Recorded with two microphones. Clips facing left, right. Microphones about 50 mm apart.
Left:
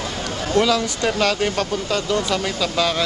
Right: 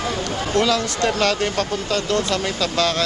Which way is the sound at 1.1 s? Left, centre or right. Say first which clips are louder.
Left 1 dB; centre.